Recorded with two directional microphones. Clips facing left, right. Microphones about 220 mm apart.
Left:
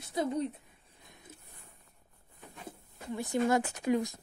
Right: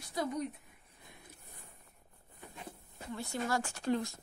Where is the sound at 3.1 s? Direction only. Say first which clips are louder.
Left 7 dB; 20° left (ahead or behind).